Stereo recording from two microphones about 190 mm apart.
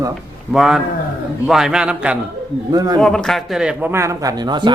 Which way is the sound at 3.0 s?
5° left (ahead or behind).